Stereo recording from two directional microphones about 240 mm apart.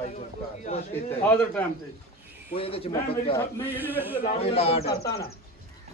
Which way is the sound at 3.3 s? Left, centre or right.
Centre.